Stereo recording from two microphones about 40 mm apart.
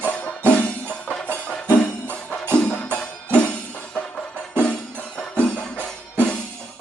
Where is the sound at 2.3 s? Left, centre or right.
Left.